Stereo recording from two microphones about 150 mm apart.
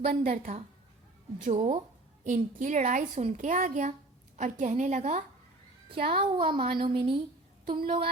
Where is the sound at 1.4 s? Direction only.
50° right (ahead or behind).